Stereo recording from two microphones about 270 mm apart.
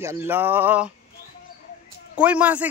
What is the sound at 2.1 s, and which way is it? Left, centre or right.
Speech, centre.